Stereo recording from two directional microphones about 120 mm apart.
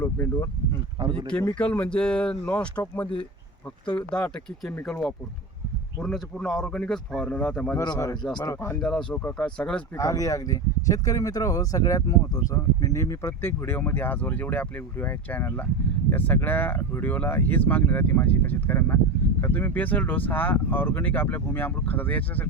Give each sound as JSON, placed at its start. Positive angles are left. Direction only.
{"t": 0.0, "sound": "speech", "side_deg": 25}
{"t": 1.3, "sound": "speech", "side_deg": 10}
{"t": 7.8, "sound": "speech", "side_deg": 25}
{"t": 8.8, "sound": "speech", "side_deg": 5}
{"t": 10.0, "sound": "speech", "side_deg": 25}